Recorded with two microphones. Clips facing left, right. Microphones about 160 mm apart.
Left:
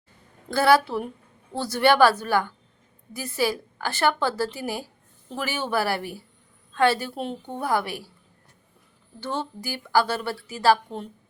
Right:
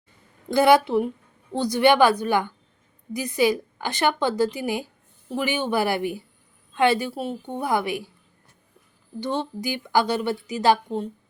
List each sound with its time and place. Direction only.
0.5 s speech: 15° right (ahead or behind)
9.2 s speech: 15° right (ahead or behind)